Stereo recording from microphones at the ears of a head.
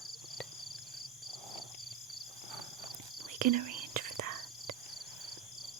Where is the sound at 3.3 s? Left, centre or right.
Right.